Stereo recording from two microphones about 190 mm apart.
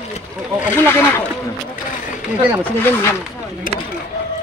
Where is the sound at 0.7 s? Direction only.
10° left (ahead or behind).